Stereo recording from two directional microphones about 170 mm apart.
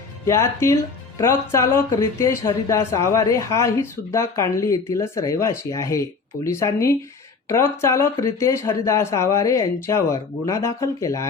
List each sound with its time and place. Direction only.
0.3 s speech: 15° left (ahead or behind)